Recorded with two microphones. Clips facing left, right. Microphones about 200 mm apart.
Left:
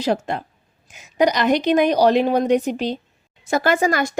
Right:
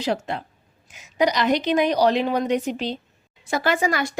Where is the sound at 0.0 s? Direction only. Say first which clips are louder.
Left 4 dB; 45° left (ahead or behind).